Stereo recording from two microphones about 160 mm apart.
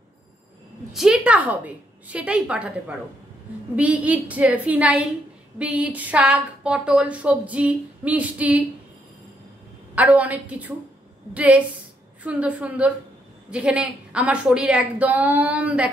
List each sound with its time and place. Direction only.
0.9 s a woman's voice: 5° right (ahead or behind)
9.9 s a woman's voice: 10° right (ahead or behind)